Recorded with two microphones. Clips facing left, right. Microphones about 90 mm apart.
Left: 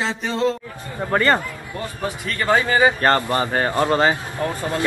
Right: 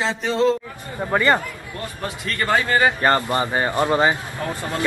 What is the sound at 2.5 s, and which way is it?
Speech, 15° left (ahead or behind).